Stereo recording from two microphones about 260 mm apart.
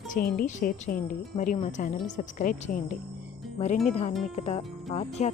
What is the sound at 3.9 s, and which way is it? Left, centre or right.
Speech, left.